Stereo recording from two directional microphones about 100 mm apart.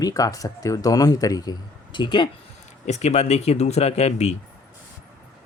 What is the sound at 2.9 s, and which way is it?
Speech, 90° left.